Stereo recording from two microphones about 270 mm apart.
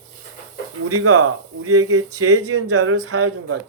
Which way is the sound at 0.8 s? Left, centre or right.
Right.